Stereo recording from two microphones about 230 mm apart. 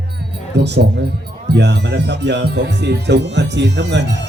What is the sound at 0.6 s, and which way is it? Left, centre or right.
A man's voice, right.